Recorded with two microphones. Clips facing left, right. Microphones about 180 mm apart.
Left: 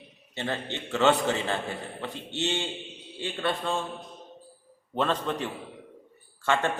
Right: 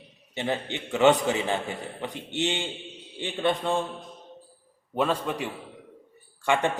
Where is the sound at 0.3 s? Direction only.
15° right (ahead or behind).